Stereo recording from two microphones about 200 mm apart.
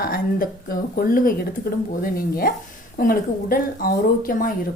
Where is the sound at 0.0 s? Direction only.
45° left (ahead or behind).